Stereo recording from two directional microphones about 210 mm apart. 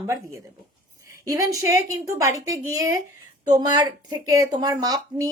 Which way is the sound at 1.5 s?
15° right (ahead or behind).